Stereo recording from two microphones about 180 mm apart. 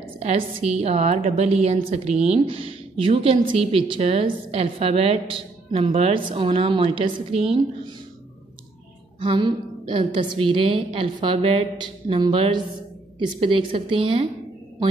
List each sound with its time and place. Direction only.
0.2 s a woman's voice: 35° right (ahead or behind)
9.2 s a woman's voice: 25° right (ahead or behind)